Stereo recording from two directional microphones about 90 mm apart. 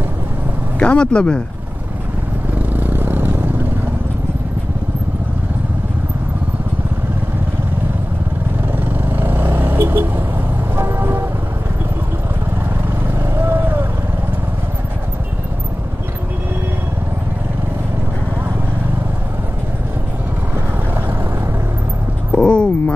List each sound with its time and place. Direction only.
0.7 s speech: 10° left (ahead or behind)
2.7 s vehicle: 20° right (ahead or behind)
9.1 s vehicle: 25° right (ahead or behind)
10.8 s music: 25° right (ahead or behind)
13.4 s vehicle: 20° right (ahead or behind)
22.3 s a sound: 10° left (ahead or behind)